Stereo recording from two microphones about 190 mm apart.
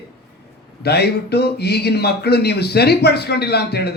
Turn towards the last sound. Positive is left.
turn(degrees=60)  # may be behind; listen again after turning